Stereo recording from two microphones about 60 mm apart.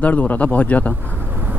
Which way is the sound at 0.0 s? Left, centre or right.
Left.